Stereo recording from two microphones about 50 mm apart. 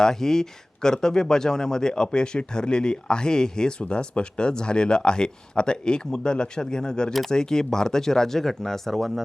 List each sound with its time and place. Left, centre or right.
0.0 s speech: centre